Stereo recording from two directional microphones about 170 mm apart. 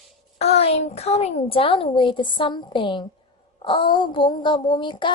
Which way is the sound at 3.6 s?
30° left (ahead or behind).